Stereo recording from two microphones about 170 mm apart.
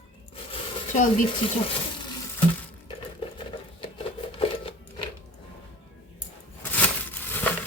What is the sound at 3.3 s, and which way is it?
Sewing machine, 30° left (ahead or behind).